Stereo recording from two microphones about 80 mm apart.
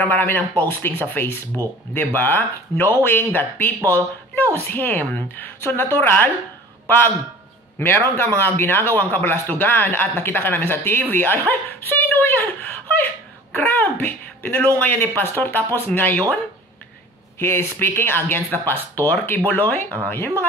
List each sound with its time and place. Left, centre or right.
0.0 s speech: left
7.8 s speech: left
17.4 s speech: left